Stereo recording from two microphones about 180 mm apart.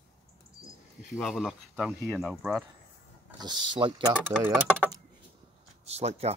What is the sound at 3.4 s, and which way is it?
Speech, 25° right (ahead or behind).